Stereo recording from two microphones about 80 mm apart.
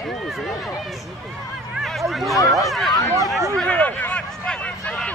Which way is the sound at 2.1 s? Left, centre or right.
Centre.